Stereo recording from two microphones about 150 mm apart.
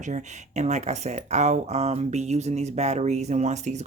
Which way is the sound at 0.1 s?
50° right (ahead or behind).